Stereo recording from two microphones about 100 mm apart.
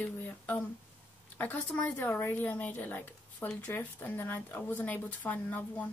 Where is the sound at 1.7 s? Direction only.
20° left (ahead or behind).